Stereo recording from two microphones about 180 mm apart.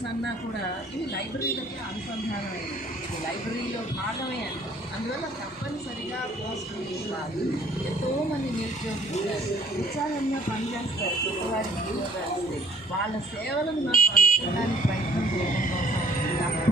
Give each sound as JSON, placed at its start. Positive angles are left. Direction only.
{"t": 13.9, "sound": "buzzer", "side_deg": 50}